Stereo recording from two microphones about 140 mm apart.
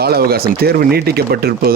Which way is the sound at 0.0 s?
90° right.